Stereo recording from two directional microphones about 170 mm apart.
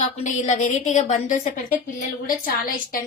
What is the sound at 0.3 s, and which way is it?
A woman's voice, 45° left (ahead or behind).